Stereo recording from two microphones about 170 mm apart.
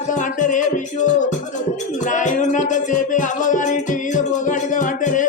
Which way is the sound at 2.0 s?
50° left (ahead or behind).